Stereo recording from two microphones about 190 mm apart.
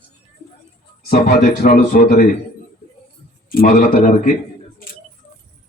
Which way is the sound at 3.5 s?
50° left (ahead or behind).